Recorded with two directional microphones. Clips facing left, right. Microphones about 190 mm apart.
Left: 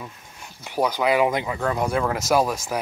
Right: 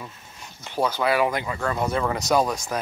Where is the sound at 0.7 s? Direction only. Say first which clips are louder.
Left 2 dB; 15° left (ahead or behind).